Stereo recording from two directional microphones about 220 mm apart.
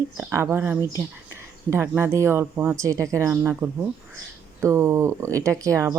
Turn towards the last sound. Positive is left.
turn(degrees=-15)  # may be behind; listen again after turning